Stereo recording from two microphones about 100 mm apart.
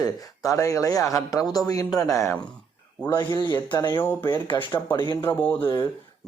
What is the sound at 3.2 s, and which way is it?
Speech, 45° left (ahead or behind).